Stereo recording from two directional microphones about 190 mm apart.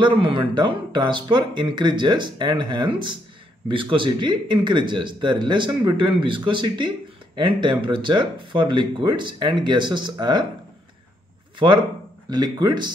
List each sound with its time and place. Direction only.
0.0 s speech: 25° right (ahead or behind)
11.5 s a man's voice: 25° right (ahead or behind)